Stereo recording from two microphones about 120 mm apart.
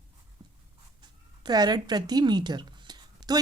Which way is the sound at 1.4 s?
35° right (ahead or behind).